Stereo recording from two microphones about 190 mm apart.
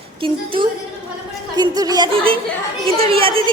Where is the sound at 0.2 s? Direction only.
25° right (ahead or behind).